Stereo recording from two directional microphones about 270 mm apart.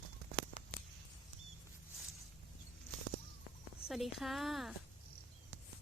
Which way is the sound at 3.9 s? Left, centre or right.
Centre.